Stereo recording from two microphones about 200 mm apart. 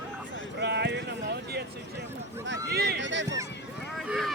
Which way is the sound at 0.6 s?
55° right (ahead or behind).